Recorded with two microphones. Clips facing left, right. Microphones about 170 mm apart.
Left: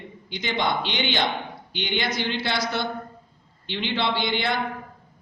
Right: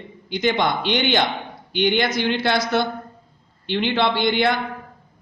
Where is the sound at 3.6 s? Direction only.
55° right (ahead or behind).